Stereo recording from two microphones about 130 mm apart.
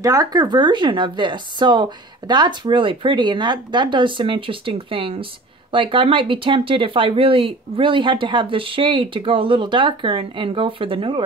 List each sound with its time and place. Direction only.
0.0 s speech: 30° right (ahead or behind)